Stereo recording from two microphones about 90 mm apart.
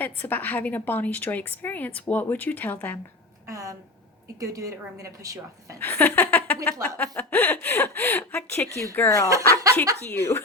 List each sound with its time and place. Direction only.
0.0 s a woman's voice: 20° left (ahead or behind)
3.4 s a sound: 35° right (ahead or behind)
4.4 s a woman's voice: 40° right (ahead or behind)
5.8 s a woman's voice: 20° left (ahead or behind)
8.8 s speech: 35° left (ahead or behind)
9.3 s speech: 35° right (ahead or behind)
10.0 s a woman's voice: 25° left (ahead or behind)